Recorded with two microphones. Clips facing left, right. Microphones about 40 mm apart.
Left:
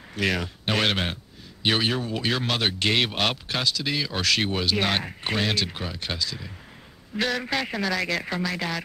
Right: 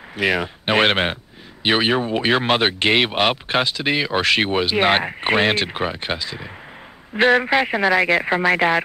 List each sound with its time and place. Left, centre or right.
0.1 s speech: right